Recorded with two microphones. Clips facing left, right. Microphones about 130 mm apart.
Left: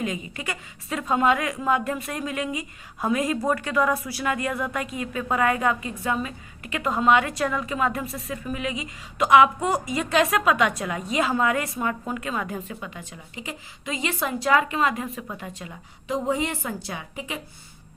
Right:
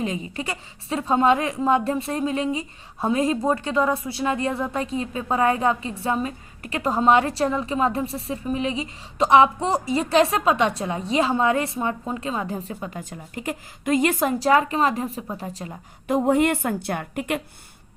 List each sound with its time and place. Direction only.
0.0 s a woman's voice: 30° right (ahead or behind)
16.0 s a woman's voice: 55° right (ahead or behind)